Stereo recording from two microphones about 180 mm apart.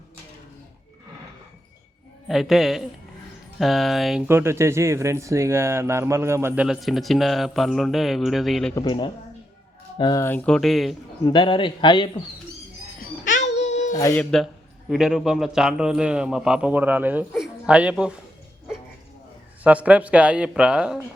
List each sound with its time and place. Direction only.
2.2 s a man's voice: centre (ahead or behind)
4.3 s speech: 15° right (ahead or behind)
6.7 s a man's voice: centre (ahead or behind)
8.7 s a man's voice: 25° left (ahead or behind)
10.2 s a man's voice: 5° left (ahead or behind)
11.3 s a man's voice: 25° left (ahead or behind)
13.2 s a sound: 45° left (ahead or behind)
13.7 s child singing: 40° left (ahead or behind)
13.9 s a man's voice: 15° left (ahead or behind); by 18.1 s 5° right (ahead or behind)
19.6 s speech: 10° right (ahead or behind)